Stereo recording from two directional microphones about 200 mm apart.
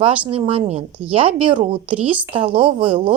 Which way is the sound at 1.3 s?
25° right (ahead or behind).